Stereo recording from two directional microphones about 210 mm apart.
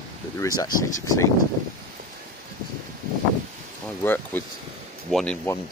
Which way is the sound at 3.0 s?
40° right (ahead or behind).